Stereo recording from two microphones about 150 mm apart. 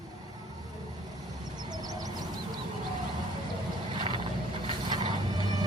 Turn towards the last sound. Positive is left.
turn(degrees=-30)  # may be behind; listen again after turning